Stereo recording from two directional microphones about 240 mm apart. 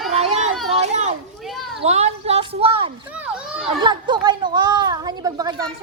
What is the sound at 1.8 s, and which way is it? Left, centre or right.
A woman's voice, right.